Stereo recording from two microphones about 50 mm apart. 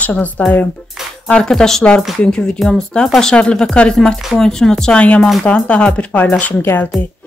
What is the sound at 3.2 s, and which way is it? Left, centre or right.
Speech, centre.